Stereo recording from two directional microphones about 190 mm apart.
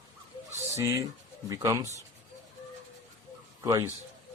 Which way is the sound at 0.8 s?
15° right (ahead or behind).